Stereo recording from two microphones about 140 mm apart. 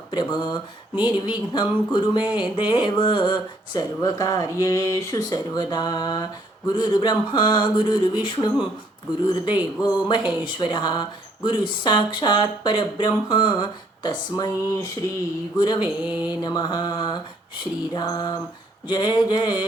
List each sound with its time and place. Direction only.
0.1 s speech: 35° left (ahead or behind)